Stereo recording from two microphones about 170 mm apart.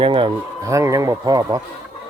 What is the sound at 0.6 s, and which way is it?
Speech, 20° right (ahead or behind).